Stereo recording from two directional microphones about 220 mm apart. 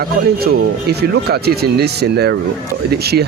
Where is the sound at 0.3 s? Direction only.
45° right (ahead or behind).